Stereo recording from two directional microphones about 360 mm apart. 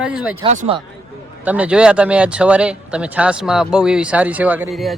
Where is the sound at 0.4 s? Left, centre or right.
Centre.